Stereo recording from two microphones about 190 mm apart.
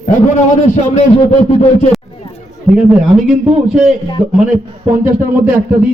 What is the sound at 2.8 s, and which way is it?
A man's voice, 5° right (ahead or behind).